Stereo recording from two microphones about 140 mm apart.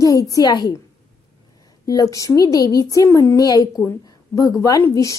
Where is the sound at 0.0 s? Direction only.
25° left (ahead or behind).